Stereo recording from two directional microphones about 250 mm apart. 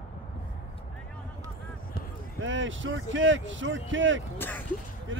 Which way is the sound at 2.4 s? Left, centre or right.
Right.